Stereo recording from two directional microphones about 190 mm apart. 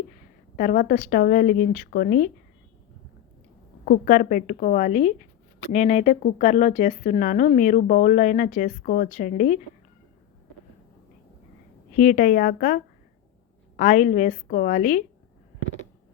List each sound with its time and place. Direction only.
0.5 s a woman's voice: 45° left (ahead or behind)
3.8 s a woman's voice: 45° left (ahead or behind)
11.9 s a woman's voice: 45° left (ahead or behind)